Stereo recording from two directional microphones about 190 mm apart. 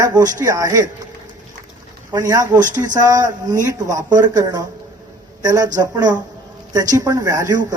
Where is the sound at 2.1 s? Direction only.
20° right (ahead or behind).